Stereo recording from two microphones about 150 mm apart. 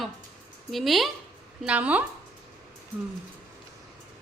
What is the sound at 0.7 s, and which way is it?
A woman's voice, centre (ahead or behind).